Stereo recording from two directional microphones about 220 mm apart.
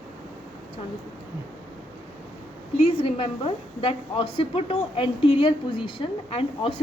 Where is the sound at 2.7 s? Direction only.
25° left (ahead or behind).